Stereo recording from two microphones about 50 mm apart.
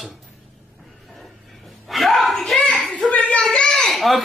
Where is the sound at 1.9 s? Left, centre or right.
Centre.